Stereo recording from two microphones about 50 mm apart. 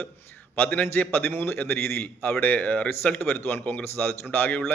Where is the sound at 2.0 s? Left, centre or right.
Left.